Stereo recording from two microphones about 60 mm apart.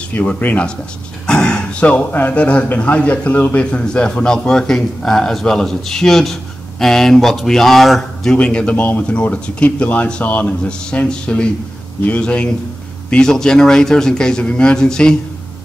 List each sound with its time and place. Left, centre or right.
0.4 s speech: left
1.2 s speech: centre
8.4 s speech: centre